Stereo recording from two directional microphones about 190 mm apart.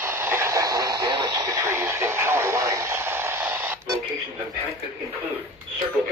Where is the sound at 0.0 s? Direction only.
10° right (ahead or behind).